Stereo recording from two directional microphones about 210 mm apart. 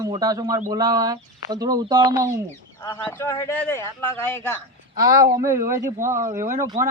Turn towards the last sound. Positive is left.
turn(degrees=-15)  # may be behind; listen again after turning